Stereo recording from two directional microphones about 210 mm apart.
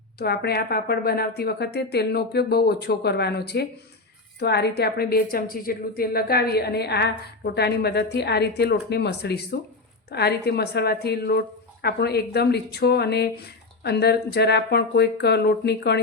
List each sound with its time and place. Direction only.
0.2 s speech: 50° left (ahead or behind)